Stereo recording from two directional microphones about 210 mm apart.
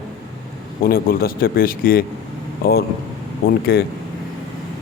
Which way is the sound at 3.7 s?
45° left (ahead or behind).